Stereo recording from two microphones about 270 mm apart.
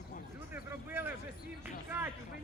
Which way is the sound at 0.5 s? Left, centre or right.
Centre.